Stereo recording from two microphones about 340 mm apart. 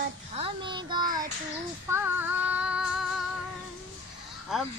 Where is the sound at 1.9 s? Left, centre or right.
Centre.